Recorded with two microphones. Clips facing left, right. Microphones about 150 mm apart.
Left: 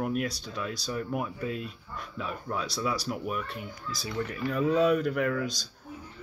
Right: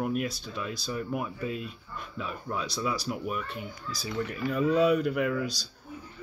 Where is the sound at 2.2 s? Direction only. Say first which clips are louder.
Even; centre (ahead or behind).